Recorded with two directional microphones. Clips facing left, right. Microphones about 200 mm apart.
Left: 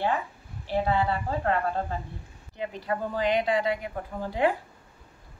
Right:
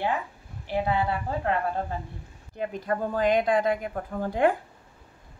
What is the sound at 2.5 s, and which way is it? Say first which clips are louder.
Speech: right 2 dB; 45° right (ahead or behind).